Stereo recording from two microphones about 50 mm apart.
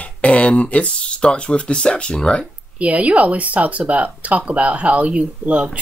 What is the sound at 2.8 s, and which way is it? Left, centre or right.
Speech, right.